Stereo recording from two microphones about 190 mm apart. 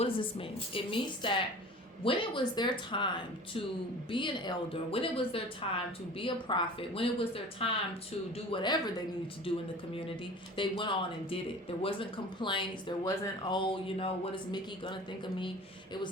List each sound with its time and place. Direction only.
0.0 s a woman's voice: 30° left (ahead or behind)
4.1 s a woman's voice: 25° left (ahead or behind)
10.6 s a woman's voice: 25° left (ahead or behind)